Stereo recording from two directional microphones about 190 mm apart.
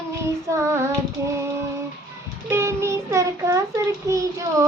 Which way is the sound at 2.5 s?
15° right (ahead or behind).